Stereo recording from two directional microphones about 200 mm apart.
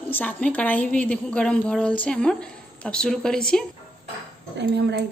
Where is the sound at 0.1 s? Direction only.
10° left (ahead or behind).